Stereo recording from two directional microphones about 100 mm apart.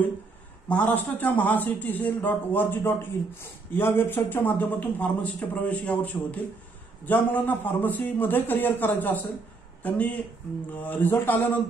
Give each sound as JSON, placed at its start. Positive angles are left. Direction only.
{"t": 0.7, "sound": "a man's voice", "side_deg": 15}